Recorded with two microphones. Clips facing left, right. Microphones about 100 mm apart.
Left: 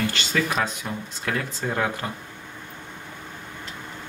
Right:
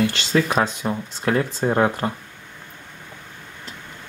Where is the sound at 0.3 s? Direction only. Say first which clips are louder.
Right 5 dB; 35° right (ahead or behind).